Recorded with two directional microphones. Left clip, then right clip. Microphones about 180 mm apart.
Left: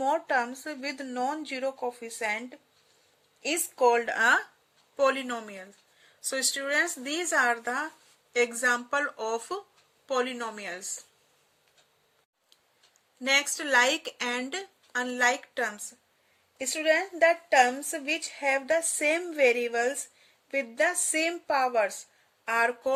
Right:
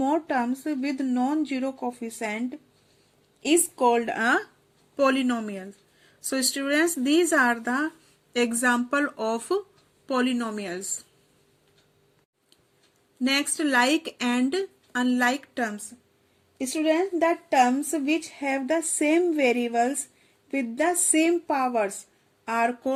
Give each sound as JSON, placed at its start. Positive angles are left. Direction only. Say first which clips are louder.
{"t": 0.0, "sound": "speech", "louder": "right 1 dB", "side_deg": 5}
{"t": 3.4, "sound": "a sound", "louder": "right 5 dB", "side_deg": 10}
{"t": 3.9, "sound": "speech", "louder": "even", "side_deg": 10}
{"t": 4.9, "sound": "a woman's voice", "louder": "right 3 dB", "side_deg": -10}
{"t": 13.2, "sound": "a woman's voice", "louder": "right 1 dB", "side_deg": -5}
{"t": 16.6, "sound": "a sound", "louder": "right 2 dB", "side_deg": 10}
{"t": 19.7, "sound": "speech", "louder": "right 4 dB", "side_deg": 0}